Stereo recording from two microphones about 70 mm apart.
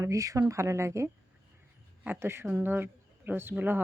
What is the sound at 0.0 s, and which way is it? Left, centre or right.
A woman's voice, right.